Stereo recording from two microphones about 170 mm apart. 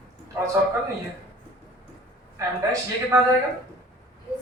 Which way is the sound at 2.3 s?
20° right (ahead or behind).